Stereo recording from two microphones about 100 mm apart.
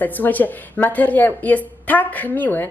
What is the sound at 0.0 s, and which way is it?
A woman's voice, 15° left (ahead or behind).